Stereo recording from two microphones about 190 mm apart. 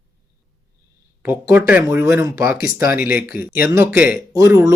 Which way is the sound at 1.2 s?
10° right (ahead or behind).